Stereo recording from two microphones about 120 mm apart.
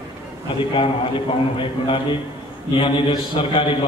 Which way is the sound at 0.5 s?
50° left (ahead or behind).